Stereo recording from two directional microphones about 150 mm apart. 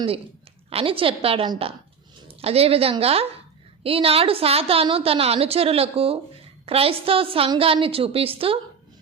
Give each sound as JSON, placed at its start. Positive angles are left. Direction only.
{"t": 0.7, "sound": "a woman's voice", "side_deg": -40}